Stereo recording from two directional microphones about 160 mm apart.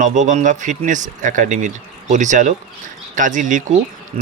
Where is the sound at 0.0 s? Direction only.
50° right (ahead or behind).